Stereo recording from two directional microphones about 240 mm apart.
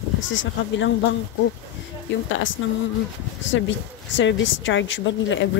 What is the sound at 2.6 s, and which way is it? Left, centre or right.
Speech, left.